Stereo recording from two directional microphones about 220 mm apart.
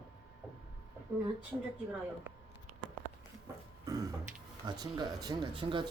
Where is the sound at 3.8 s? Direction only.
15° right (ahead or behind).